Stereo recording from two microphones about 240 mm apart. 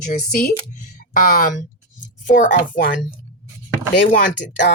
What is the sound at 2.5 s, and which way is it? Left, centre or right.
Speech, left.